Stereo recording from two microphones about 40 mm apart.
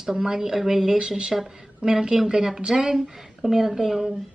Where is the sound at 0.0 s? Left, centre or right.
Centre.